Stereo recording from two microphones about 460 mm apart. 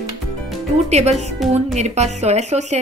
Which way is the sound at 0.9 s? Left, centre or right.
Centre.